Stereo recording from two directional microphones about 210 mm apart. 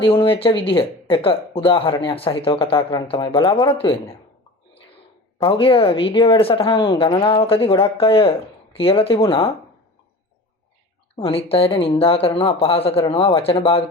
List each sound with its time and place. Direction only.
0.0 s speech: 25° left (ahead or behind)
5.4 s speech: 25° left (ahead or behind)
11.2 s speech: 25° left (ahead or behind)